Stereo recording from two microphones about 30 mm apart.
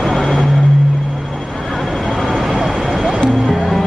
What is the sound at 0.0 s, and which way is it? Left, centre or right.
Vehicle, centre.